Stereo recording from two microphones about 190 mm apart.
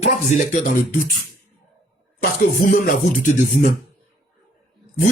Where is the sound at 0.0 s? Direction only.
40° left (ahead or behind).